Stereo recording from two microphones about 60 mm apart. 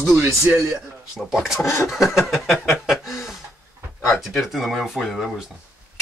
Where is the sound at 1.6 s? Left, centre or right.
Left.